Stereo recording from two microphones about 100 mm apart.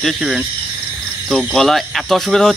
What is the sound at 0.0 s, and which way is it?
Speech, 5° right (ahead or behind).